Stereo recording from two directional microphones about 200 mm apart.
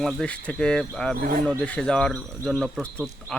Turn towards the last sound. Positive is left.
turn(degrees=0)  # may be behind; listen again after turning